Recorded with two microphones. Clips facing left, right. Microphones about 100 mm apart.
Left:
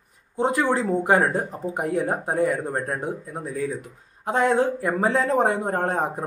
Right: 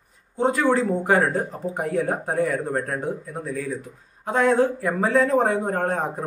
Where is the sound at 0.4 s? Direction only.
20° left (ahead or behind).